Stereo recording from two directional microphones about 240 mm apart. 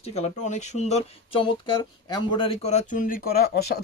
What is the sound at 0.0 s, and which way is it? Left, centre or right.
Speech, left.